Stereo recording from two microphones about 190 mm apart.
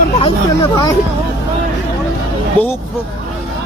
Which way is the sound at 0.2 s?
25° left (ahead or behind).